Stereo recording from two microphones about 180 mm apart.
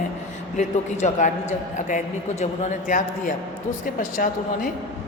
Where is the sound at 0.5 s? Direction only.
40° left (ahead or behind).